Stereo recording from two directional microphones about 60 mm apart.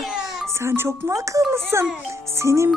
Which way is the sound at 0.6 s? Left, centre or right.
Right.